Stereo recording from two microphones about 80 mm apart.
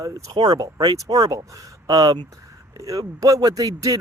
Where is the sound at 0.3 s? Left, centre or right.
Right.